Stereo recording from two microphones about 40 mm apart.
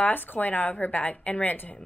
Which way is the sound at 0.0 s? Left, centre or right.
Left.